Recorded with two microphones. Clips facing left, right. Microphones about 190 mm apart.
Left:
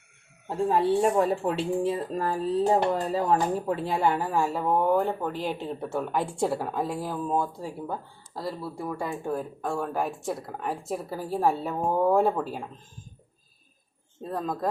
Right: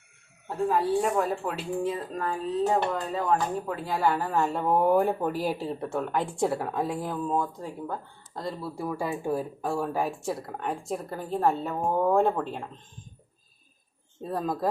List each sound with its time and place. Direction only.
0.4 s a woman's voice: 30° left (ahead or behind); by 12.6 s 5° left (ahead or behind)
14.2 s speech: 5° right (ahead or behind)